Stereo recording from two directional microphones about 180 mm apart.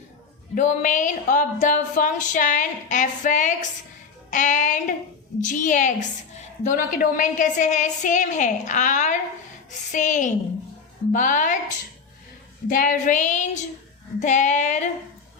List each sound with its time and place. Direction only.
0.5 s speech: 45° left (ahead or behind)
12.6 s speech: 45° left (ahead or behind)
14.2 s female singing: 40° left (ahead or behind)